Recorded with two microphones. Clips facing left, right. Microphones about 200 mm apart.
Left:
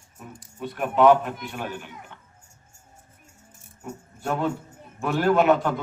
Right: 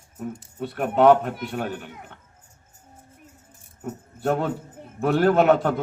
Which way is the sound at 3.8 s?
55° right (ahead or behind).